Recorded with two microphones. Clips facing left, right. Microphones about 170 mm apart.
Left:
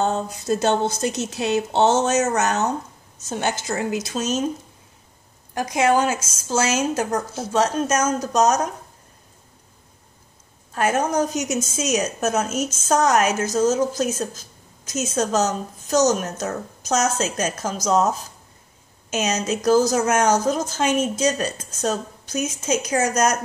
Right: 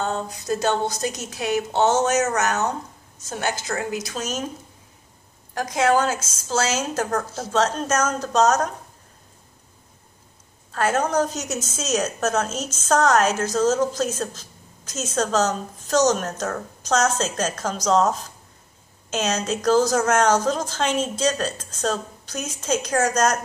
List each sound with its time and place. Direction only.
0.0 s speech: 25° left (ahead or behind)
5.5 s a woman's voice: 15° left (ahead or behind)
10.7 s a woman's voice: 15° left (ahead or behind)